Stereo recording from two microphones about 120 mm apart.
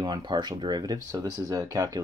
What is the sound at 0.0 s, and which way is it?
Speech, 35° right (ahead or behind).